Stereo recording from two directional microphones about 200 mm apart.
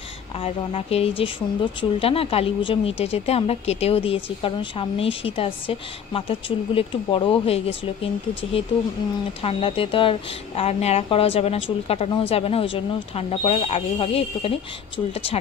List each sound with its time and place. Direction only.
0.4 s speech: 30° left (ahead or behind)